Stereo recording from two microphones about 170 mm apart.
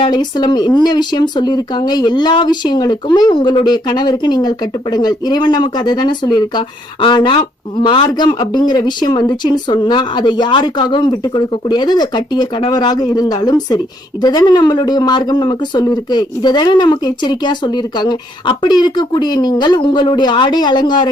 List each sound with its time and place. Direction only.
0.0 s speech: 25° left (ahead or behind)